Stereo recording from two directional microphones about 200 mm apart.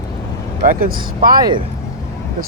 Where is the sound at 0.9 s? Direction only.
20° right (ahead or behind).